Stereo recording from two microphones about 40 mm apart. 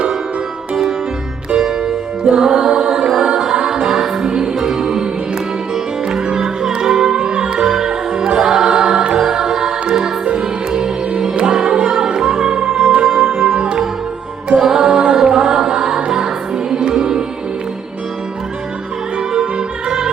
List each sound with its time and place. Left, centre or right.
1.6 s music: centre
19.3 s music: right